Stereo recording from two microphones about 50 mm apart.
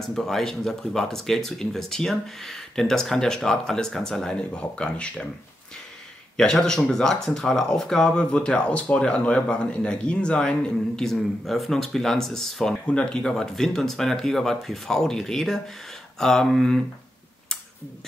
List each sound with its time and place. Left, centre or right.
0.0 s speech: centre; by 5.3 s left
6.3 s speech: centre
11.0 s speech: centre
12.8 s speech: left
13.2 s speech: centre